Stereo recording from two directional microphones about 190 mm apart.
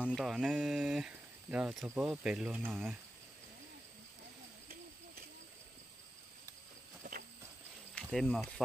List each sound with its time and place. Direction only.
0.0 s speech: centre (ahead or behind)
7.0 s horse: 50° right (ahead or behind)
7.9 s speech: centre (ahead or behind)